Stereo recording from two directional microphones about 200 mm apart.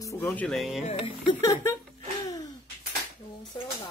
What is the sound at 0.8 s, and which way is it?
Speech, 35° left (ahead or behind).